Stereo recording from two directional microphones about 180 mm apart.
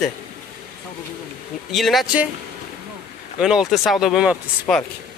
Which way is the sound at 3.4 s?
Centre (ahead or behind).